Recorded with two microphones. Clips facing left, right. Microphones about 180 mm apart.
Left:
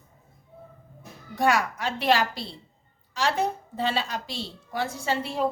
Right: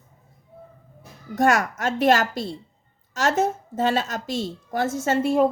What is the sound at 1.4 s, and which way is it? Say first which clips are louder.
A woman's voice: right 3 dB; 45° right (ahead or behind).